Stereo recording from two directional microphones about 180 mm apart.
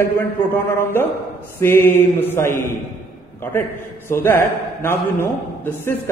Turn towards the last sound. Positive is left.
turn(degrees=15)  # may be behind; listen again after turning